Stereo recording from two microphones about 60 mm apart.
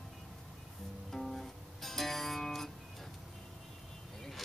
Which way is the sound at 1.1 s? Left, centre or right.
Centre.